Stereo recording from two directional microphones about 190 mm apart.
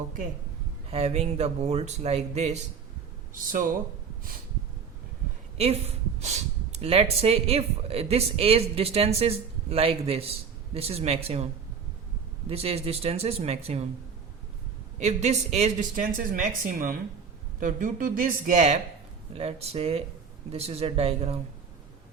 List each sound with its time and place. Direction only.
0.9 s speech: 35° right (ahead or behind)
3.3 s speech: 45° right (ahead or behind)
5.5 s speech: 35° right (ahead or behind)
12.5 s speech: 30° right (ahead or behind)
14.9 s speech: 35° right (ahead or behind)